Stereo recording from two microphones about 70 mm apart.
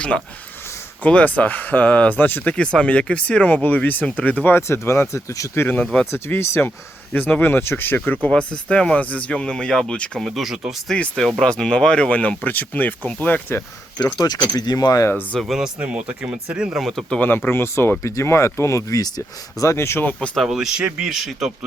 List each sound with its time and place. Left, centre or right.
1.0 s speech: left
5.5 s speech: left
5.8 s speech: centre
6.1 s speech: left
8.3 s speech: centre
10.9 s speech: centre; by 13.6 s left
14.0 s speech: left
15.4 s speech: centre
15.8 s speech: centre
16.8 s speech: centre
17.2 s speech: left
19.6 s speech: left
20.1 s speech: centre
20.5 s speech: centre